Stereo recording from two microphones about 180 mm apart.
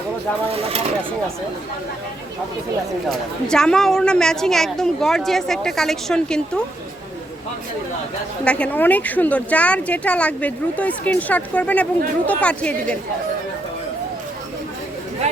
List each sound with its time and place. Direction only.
3.1 s a woman's voice: 5° left (ahead or behind)
8.4 s speech: 5° left (ahead or behind)
15.2 s a sound: 35° right (ahead or behind)